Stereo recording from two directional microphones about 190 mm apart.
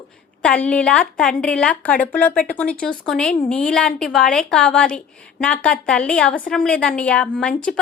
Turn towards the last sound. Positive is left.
turn(degrees=5)  # may be behind; listen again after turning